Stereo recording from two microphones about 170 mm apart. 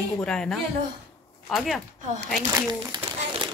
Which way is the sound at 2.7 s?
25° right (ahead or behind).